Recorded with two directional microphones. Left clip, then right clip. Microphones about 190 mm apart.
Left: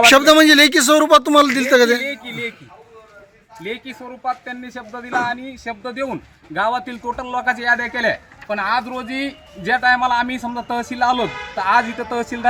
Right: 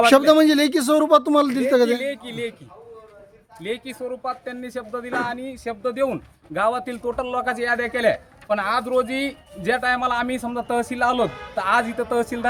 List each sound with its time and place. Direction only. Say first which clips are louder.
0.0 s a man's voice: left 4 dB; 5° right (ahead or behind)
3.6 s speech: even; 20° right (ahead or behind)